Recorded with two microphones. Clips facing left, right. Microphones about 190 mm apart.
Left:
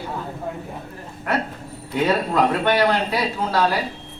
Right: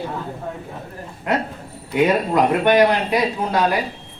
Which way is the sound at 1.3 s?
20° right (ahead or behind).